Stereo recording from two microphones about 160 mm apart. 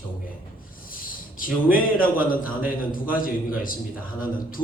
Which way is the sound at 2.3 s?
60° left (ahead or behind).